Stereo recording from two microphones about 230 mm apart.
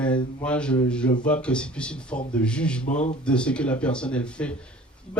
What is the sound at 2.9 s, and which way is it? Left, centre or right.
Speech, left.